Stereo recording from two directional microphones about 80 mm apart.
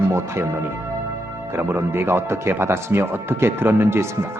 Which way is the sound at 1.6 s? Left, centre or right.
Right.